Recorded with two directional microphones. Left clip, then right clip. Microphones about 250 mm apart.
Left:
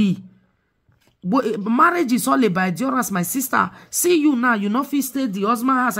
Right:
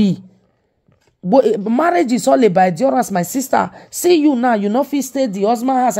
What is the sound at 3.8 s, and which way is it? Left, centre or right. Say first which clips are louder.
Speech: right 4 dB; left.